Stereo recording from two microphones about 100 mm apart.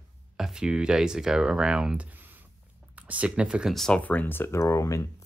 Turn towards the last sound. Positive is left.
turn(degrees=30)  # may be behind; listen again after turning